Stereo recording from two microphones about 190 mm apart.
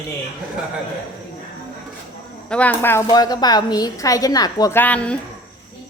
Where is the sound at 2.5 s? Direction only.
5° left (ahead or behind).